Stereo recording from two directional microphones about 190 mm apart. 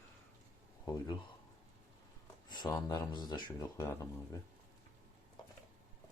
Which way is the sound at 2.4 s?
20° left (ahead or behind).